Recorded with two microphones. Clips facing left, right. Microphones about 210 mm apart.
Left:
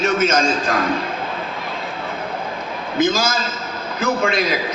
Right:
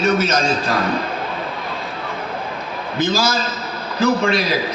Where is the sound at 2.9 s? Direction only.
35° right (ahead or behind).